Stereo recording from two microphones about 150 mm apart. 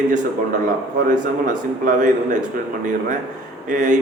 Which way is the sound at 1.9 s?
60° right (ahead or behind).